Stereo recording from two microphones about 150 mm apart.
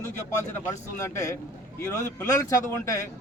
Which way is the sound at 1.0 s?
20° left (ahead or behind).